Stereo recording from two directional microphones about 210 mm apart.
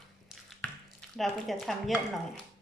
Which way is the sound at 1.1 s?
Centre (ahead or behind).